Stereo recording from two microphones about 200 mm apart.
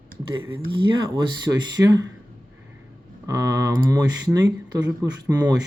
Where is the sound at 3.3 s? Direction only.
15° right (ahead or behind).